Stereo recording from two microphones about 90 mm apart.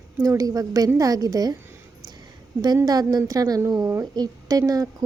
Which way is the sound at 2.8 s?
45° right (ahead or behind).